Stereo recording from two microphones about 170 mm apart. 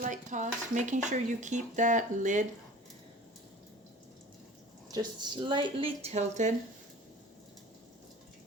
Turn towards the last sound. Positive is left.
turn(degrees=-45)  # may be behind; listen again after turning